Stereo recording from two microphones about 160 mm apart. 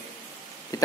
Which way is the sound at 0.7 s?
20° left (ahead or behind).